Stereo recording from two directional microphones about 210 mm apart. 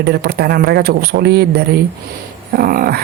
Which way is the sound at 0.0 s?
50° right (ahead or behind).